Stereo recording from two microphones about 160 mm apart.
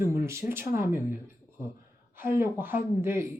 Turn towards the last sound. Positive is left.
turn(degrees=-15)  # may be behind; listen again after turning